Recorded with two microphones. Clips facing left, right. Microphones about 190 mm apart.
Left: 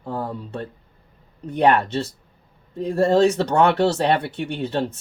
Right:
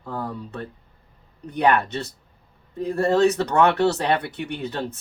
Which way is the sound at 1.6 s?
30° left (ahead or behind).